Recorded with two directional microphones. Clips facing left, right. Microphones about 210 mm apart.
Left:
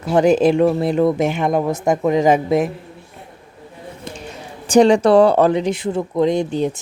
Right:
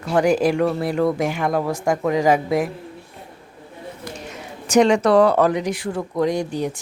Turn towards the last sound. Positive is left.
turn(degrees=25)  # may be behind; listen again after turning